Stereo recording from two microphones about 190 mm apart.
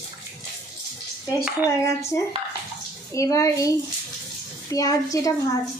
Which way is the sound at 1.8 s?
15° left (ahead or behind).